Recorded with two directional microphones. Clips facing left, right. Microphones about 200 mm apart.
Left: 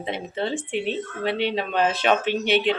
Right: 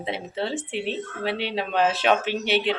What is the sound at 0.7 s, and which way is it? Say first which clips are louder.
Speech: left 2 dB; 40° right (ahead or behind).